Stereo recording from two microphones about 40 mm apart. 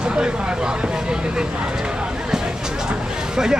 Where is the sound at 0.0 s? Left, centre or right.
Right.